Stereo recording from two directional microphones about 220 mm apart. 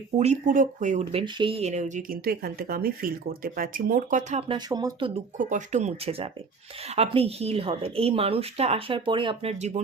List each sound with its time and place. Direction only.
0.2 s speech: 35° right (ahead or behind)
5.4 s a woman's voice: 35° right (ahead or behind)